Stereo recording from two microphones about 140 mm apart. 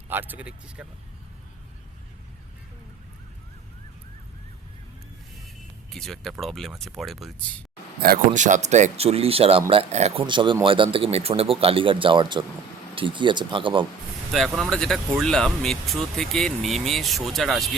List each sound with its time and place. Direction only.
0.1 s speech: 15° right (ahead or behind)
5.9 s speech: 5° left (ahead or behind)
8.0 s speech: 75° right (ahead or behind); by 10.2 s 45° right (ahead or behind)
10.2 s a man's voice: 35° right (ahead or behind)
14.3 s speech: centre (ahead or behind)